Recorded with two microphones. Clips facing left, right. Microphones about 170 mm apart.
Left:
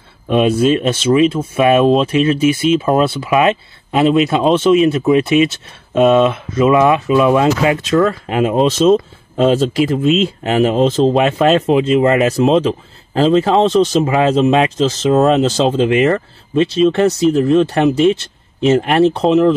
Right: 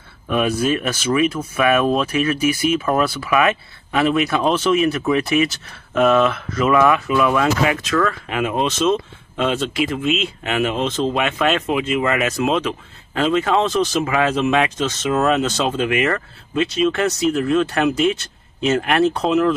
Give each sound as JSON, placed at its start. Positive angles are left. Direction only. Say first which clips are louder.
{"t": 0.3, "sound": "speech", "louder": "left 6 dB", "side_deg": 25}